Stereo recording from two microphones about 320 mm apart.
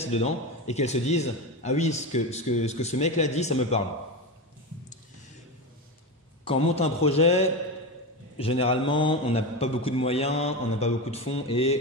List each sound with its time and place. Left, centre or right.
0.0 s a man's voice: centre
6.4 s a man's voice: centre